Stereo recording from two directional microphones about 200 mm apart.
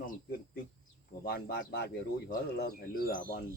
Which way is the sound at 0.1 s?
50° left (ahead or behind).